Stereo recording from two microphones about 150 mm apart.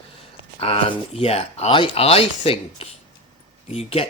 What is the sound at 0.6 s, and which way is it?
Speech, 40° left (ahead or behind).